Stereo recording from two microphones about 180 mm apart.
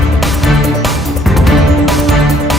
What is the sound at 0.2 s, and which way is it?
Music, centre (ahead or behind).